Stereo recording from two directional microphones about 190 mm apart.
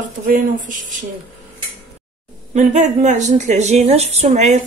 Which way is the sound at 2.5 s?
40° right (ahead or behind).